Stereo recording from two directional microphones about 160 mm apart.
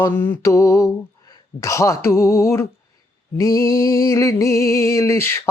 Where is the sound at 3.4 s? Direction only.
20° left (ahead or behind).